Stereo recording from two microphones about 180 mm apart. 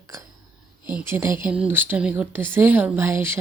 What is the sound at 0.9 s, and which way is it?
Speech, 10° right (ahead or behind).